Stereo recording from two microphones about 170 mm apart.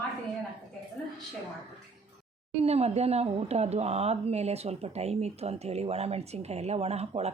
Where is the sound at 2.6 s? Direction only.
40° right (ahead or behind).